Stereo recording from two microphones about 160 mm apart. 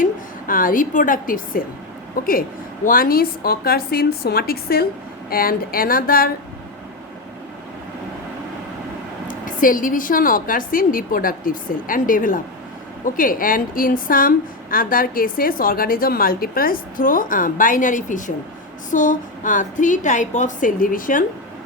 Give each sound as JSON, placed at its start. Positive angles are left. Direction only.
{"t": 0.0, "sound": "a woman's voice", "side_deg": 60}
{"t": 9.2, "sound": "a woman's voice", "side_deg": 60}